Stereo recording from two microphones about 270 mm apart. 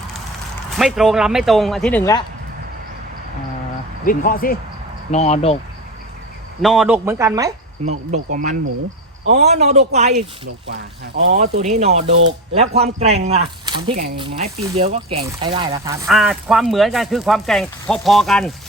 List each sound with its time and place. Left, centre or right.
0.8 s speech: centre
4.0 s speech: left
6.6 s speech: centre
7.9 s speech: right
10.4 s speech: right
11.5 s speech: right
16.0 s speech: centre